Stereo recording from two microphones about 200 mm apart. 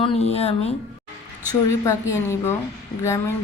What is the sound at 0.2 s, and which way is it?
Speech, 30° left (ahead or behind).